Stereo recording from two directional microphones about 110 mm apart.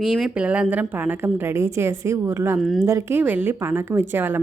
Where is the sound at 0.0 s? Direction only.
5° right (ahead or behind); by 2.6 s 25° right (ahead or behind).